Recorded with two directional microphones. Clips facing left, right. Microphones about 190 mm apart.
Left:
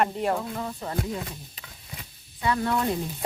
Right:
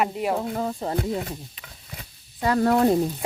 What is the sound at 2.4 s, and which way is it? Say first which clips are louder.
Speech: right 6 dB; 40° right (ahead or behind).